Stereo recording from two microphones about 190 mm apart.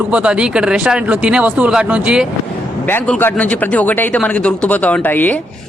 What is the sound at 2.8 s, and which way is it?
Speech, 10° left (ahead or behind).